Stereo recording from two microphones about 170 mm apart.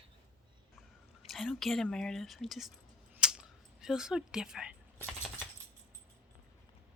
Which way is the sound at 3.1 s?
5° right (ahead or behind).